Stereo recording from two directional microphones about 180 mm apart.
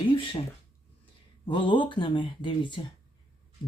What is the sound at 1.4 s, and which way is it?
Speech, 25° left (ahead or behind).